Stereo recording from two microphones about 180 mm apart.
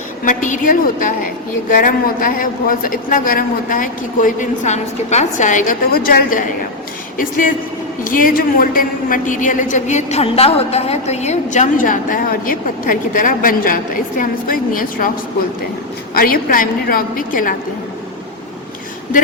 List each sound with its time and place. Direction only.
0.3 s a woman's voice: 45° left (ahead or behind)
16.1 s a woman's voice: 55° left (ahead or behind)